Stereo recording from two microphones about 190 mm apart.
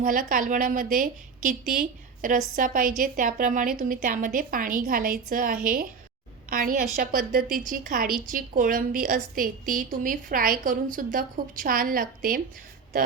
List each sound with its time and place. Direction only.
0.0 s a woman's voice: 45° right (ahead or behind)